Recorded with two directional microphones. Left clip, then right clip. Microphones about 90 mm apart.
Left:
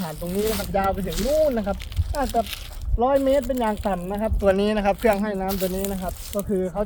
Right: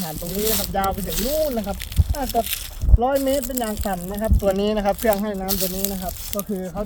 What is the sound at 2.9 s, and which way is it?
Speech, 10° right (ahead or behind).